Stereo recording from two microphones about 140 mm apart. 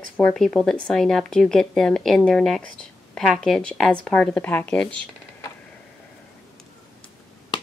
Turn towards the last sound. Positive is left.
turn(degrees=30)  # may be behind; listen again after turning